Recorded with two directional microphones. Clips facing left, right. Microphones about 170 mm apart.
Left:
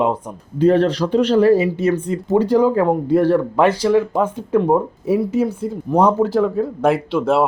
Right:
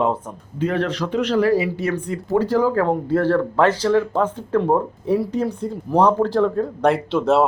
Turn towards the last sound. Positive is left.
turn(degrees=0)  # may be behind; listen again after turning